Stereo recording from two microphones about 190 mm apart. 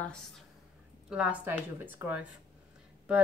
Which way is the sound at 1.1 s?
5° right (ahead or behind).